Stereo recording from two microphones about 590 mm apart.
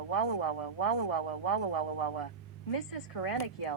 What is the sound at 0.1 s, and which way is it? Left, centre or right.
A woman's voice, left.